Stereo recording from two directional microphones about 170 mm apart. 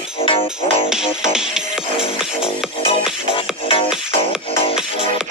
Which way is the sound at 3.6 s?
30° left (ahead or behind).